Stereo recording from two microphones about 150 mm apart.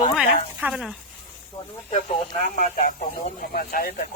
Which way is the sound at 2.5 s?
60° left (ahead or behind).